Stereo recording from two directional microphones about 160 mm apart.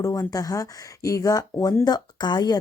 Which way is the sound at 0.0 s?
20° left (ahead or behind).